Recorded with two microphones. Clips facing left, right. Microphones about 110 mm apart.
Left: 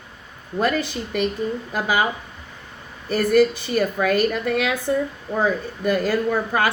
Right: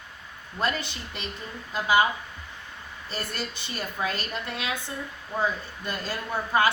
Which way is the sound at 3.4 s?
65° left (ahead or behind).